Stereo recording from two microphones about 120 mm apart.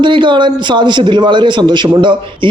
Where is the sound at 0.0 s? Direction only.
40° right (ahead or behind).